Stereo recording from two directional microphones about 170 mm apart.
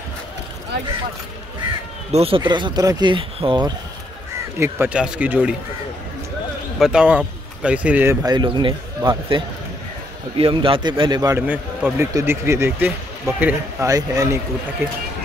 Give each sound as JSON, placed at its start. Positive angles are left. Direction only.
{"t": 2.1, "sound": "a man's voice", "side_deg": -35}
{"t": 4.6, "sound": "speech", "side_deg": -15}
{"t": 6.8, "sound": "speech", "side_deg": -5}
{"t": 8.3, "sound": "a man's voice", "side_deg": -25}